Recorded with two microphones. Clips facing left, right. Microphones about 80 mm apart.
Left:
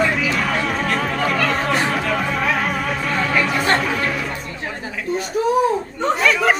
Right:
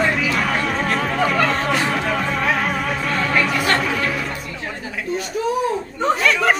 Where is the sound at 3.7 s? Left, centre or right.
Centre.